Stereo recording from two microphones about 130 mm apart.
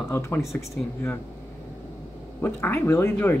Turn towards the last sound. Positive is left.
turn(degrees=15)  # may be behind; listen again after turning